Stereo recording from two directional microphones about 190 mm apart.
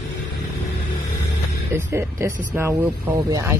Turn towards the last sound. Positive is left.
turn(degrees=-15)  # may be behind; listen again after turning